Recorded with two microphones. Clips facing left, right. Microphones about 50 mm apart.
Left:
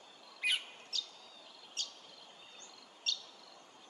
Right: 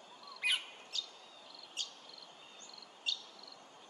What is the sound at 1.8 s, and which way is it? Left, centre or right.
Cricket, centre.